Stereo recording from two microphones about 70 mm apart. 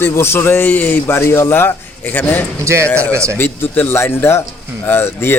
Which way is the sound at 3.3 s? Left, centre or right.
Left.